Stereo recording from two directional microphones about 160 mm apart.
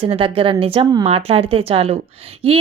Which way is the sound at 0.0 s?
35° right (ahead or behind).